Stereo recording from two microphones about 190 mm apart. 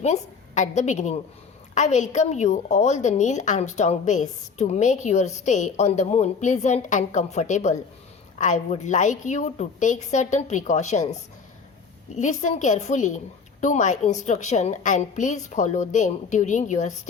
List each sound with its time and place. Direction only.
0.0 s a woman's voice: 40° left (ahead or behind)